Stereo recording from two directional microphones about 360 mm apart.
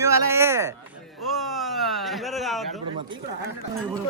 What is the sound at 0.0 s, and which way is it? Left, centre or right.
Speech, centre.